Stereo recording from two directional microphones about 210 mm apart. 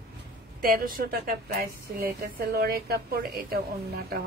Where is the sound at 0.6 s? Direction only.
45° right (ahead or behind).